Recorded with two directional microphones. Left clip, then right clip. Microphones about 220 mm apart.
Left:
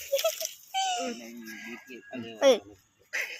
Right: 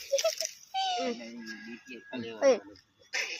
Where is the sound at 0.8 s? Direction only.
10° right (ahead or behind).